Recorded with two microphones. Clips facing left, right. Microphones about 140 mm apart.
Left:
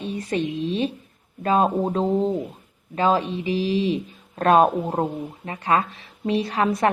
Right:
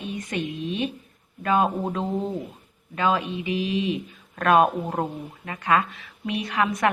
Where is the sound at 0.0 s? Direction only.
35° left (ahead or behind).